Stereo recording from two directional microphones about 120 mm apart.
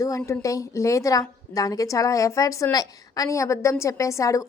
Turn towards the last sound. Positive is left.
turn(degrees=25)  # may be behind; listen again after turning